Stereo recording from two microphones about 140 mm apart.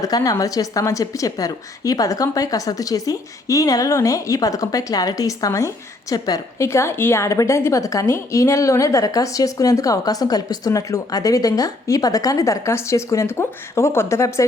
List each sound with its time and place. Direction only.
0.0 s a woman's voice: 25° left (ahead or behind)